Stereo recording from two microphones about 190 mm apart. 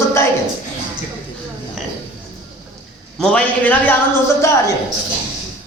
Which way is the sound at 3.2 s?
5° left (ahead or behind).